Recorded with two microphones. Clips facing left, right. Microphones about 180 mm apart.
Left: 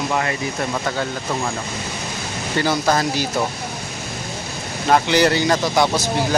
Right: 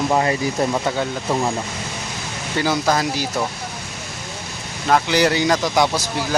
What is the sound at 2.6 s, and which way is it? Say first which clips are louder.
Speech: even; 5° right (ahead or behind).